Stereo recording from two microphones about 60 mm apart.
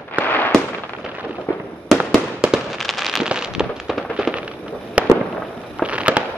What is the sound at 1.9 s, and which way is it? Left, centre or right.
Fireworks, centre.